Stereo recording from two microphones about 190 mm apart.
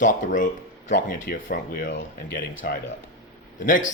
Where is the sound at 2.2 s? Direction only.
70° left (ahead or behind).